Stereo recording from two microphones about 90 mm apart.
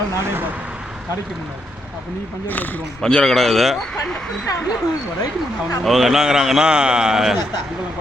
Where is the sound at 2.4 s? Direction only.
20° left (ahead or behind).